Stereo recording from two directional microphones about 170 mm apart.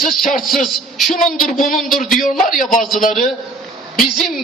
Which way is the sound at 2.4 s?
50° left (ahead or behind).